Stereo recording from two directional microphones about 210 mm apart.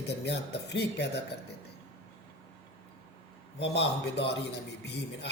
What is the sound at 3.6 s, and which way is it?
Speech, 55° left (ahead or behind).